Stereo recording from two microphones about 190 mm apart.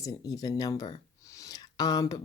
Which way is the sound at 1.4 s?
20° left (ahead or behind).